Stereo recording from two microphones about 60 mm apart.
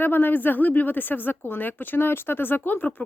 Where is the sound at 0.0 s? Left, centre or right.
Left.